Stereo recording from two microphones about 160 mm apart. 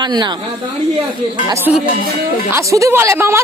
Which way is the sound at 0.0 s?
25° right (ahead or behind).